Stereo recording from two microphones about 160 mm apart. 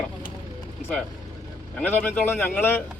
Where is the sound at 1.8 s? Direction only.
10° left (ahead or behind).